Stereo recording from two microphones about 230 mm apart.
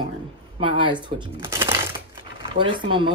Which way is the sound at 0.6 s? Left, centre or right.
Right.